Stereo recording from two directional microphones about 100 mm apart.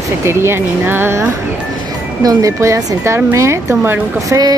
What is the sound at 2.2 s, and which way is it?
Speech, 35° right (ahead or behind).